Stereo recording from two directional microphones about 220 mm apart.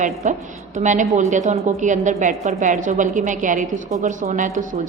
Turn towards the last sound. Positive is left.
turn(degrees=-35)  # may be behind; listen again after turning